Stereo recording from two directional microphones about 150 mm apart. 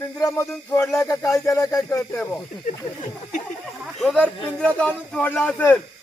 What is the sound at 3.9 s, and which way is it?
Speech, 5° left (ahead or behind).